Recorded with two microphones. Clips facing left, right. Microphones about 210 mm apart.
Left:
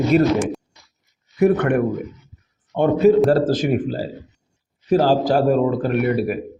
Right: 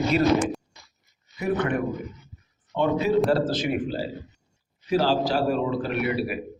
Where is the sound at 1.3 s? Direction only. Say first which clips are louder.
Left 9 dB; 60° left (ahead or behind).